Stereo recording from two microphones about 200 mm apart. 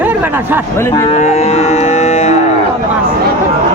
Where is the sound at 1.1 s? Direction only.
35° left (ahead or behind).